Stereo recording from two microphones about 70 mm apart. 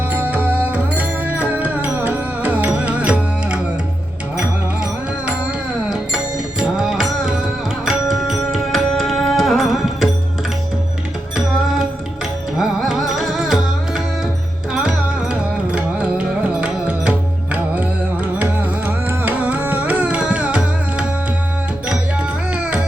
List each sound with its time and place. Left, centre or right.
0.1 s music: right; by 10.1 s centre
12.5 s music: centre
22.5 s music: centre